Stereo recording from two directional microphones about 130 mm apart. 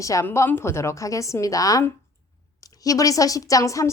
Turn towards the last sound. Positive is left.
turn(degrees=25)  # may be behind; listen again after turning